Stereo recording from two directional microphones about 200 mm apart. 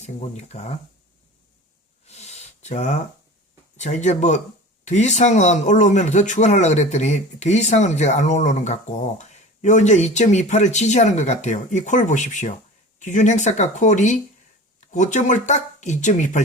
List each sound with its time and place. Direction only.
0.0 s speech: 35° left (ahead or behind)
2.0 s a sound: 35° left (ahead or behind)
3.8 s speech: 35° left (ahead or behind)